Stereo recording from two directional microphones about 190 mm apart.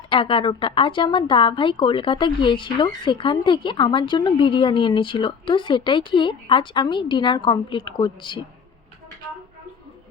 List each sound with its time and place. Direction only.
0.1 s a woman's voice: 25° left (ahead or behind)